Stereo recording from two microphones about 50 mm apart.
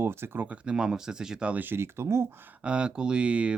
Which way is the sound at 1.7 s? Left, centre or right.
Right.